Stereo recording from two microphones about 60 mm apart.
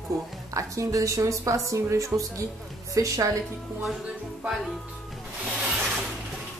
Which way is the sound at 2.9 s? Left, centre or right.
Right.